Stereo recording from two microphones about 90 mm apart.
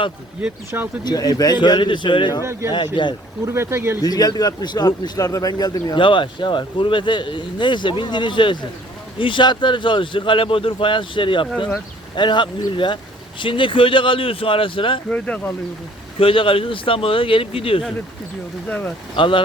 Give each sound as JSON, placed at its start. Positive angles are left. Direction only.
{"t": 1.0, "sound": "speech", "side_deg": 45}
{"t": 2.4, "sound": "speech", "side_deg": -30}
{"t": 2.7, "sound": "speech", "side_deg": 60}
{"t": 3.4, "sound": "speech", "side_deg": -30}
{"t": 4.0, "sound": "speech", "side_deg": 45}
{"t": 6.0, "sound": "speech", "side_deg": 65}
{"t": 16.1, "sound": "speech", "side_deg": 85}
{"t": 18.7, "sound": "speech", "side_deg": 15}
{"t": 19.1, "sound": "speech", "side_deg": 75}